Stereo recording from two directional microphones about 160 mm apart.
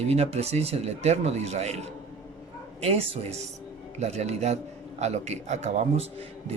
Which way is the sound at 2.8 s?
40° right (ahead or behind).